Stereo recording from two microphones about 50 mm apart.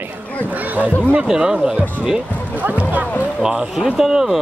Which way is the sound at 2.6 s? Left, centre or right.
Right.